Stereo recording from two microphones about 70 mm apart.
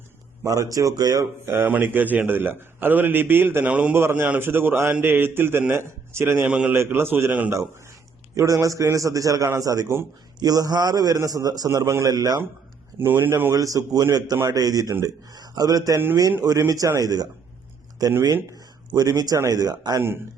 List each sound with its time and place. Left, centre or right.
0.4 s a man's voice: right
1.5 s a man's voice: right
3.7 s a man's voice: centre
3.9 s a man's voice: right
6.5 s a man's voice: centre
6.7 s a man's voice: right
8.4 s a man's voice: right
11.2 s a man's voice: right
11.7 s a man's voice: right
12.0 s a man's voice: right
13.0 s a man's voice: right
13.5 s a man's voice: right
18.9 s a man's voice: right